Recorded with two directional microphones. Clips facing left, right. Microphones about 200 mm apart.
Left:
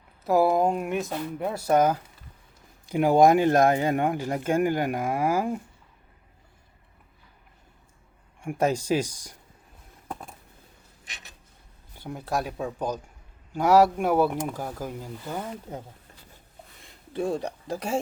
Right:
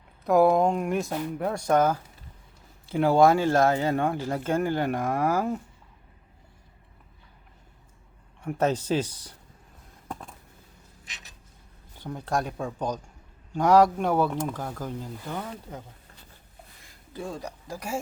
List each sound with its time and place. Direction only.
0.3 s speech: 5° left (ahead or behind)
8.4 s speech: 10° left (ahead or behind)
10.1 s a sound: 10° left (ahead or behind)
11.9 s speech: 10° left (ahead or behind)
15.7 s speech: 25° left (ahead or behind)
17.3 s speech: 25° left (ahead or behind)